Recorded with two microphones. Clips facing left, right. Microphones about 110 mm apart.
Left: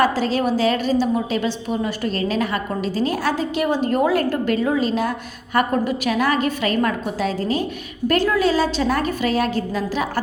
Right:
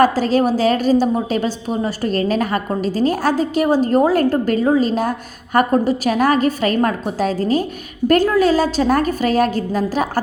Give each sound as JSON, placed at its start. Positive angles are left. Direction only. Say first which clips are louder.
{"t": 0.0, "sound": "a woman's voice", "louder": "right 4 dB", "side_deg": -45}